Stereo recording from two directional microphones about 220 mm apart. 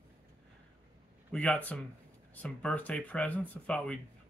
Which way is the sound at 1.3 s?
5° left (ahead or behind).